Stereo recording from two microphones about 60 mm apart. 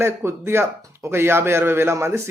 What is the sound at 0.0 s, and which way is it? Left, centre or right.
A man's voice, right.